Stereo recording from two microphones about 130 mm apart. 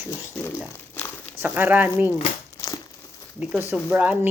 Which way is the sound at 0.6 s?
10° left (ahead or behind).